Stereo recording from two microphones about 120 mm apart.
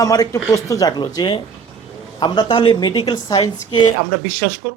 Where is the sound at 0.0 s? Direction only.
30° left (ahead or behind).